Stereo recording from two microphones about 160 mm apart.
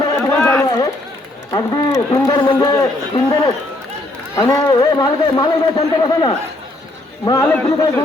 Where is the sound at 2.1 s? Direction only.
25° left (ahead or behind).